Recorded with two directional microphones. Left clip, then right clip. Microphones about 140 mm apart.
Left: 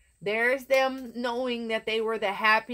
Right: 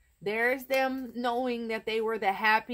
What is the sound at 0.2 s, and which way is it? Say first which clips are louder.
A woman's voice: left 3 dB; 45° right (ahead or behind).